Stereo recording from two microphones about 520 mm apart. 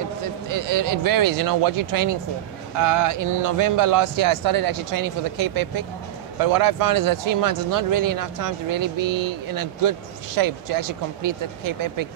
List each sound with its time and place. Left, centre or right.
0.5 s speech: right